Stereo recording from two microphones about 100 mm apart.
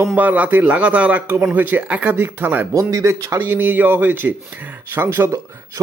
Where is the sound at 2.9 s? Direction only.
30° right (ahead or behind).